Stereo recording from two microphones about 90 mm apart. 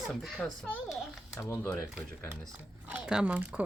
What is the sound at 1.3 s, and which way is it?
Speech, 20° left (ahead or behind).